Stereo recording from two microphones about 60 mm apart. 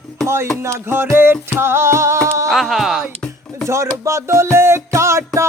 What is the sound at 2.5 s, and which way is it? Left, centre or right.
Speech, centre.